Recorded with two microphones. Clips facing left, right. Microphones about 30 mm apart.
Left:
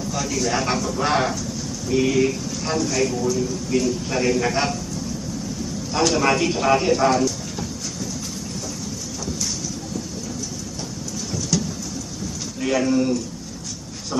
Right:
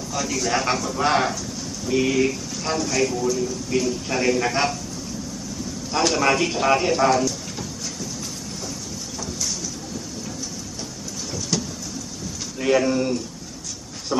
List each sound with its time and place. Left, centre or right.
0.1 s a man's voice: centre
5.9 s a man's voice: centre
11.5 s a sound: centre
12.5 s speech: centre